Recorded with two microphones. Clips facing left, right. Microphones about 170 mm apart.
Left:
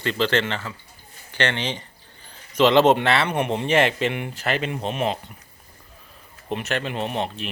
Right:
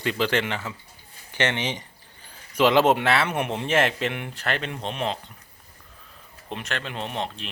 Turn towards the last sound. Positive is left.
turn(degrees=5)  # may be behind; listen again after turning